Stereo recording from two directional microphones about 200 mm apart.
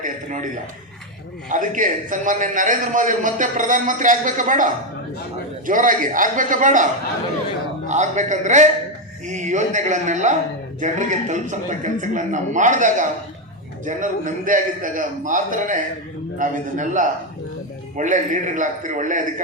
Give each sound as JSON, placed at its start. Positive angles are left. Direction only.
{"t": 0.0, "sound": "a man's voice", "side_deg": -40}
{"t": 7.9, "sound": "a man's voice", "side_deg": -35}